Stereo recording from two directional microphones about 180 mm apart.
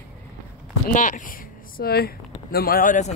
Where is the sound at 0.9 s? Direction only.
45° left (ahead or behind).